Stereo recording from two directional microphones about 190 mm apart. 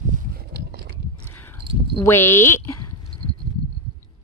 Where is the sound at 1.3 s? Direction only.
10° left (ahead or behind).